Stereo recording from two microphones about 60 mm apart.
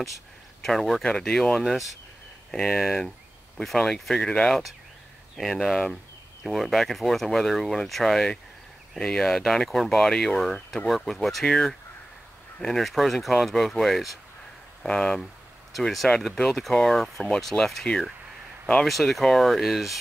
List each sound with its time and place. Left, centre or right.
0.6 s speech: centre
1.6 s speech: centre
2.5 s speech: centre
2.8 s speech: centre
3.6 s speech: centre
5.3 s speech: centre
11.4 s speech: centre
12.8 s speech: centre
15.7 s speech: centre
17.5 s speech: centre
18.9 s speech: centre